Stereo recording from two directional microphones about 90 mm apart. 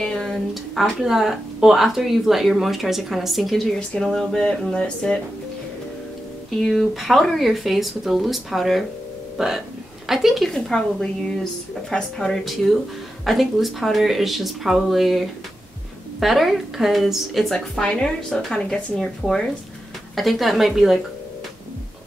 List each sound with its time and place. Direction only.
0.0 s speech: 5° left (ahead or behind)
6.5 s speech: 5° left (ahead or behind)
17.6 s speech: 10° left (ahead or behind)